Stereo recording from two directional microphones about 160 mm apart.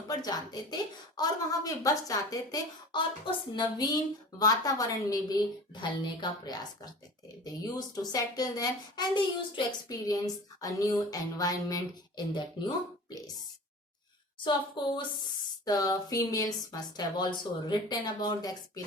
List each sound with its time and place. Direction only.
0.1 s a woman's voice: 25° left (ahead or behind)
14.8 s a woman's voice: 30° left (ahead or behind)